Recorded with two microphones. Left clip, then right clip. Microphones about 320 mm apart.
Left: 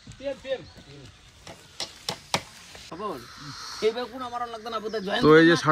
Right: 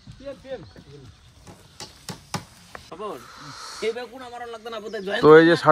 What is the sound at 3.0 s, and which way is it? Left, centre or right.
Speech, centre.